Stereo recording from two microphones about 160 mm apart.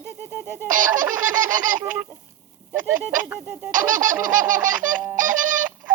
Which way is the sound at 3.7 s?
55° right (ahead or behind).